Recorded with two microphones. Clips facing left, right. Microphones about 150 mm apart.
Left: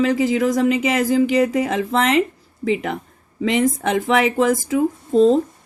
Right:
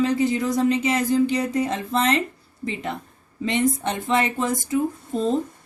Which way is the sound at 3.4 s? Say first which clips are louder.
Left 4 dB; 90° left.